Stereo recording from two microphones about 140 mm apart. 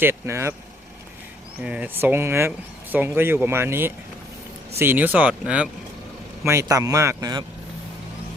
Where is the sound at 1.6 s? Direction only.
10° right (ahead or behind).